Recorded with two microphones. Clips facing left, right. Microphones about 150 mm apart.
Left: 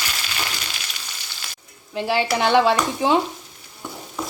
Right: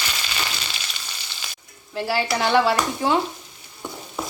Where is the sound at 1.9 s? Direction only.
20° left (ahead or behind).